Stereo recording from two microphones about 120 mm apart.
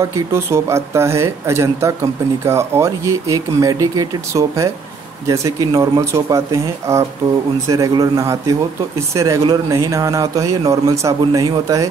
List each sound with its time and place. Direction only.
0.0 s speech: 25° right (ahead or behind)